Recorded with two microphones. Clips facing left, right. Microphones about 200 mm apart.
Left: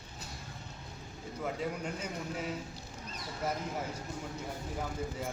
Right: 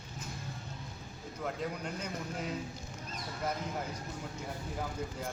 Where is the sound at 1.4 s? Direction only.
5° left (ahead or behind).